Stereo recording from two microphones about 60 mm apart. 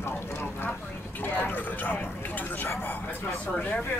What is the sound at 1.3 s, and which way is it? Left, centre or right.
Speech, left.